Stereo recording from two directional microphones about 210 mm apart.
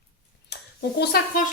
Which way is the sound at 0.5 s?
50° left (ahead or behind).